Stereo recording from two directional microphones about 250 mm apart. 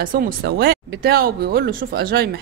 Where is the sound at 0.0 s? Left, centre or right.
Right.